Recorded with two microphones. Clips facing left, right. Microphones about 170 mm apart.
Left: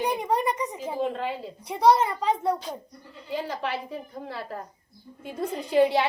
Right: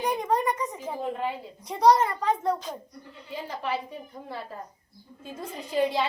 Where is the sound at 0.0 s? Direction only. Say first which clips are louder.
Even; 10° left (ahead or behind).